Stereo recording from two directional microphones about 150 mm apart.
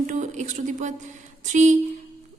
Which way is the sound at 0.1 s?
55° right (ahead or behind).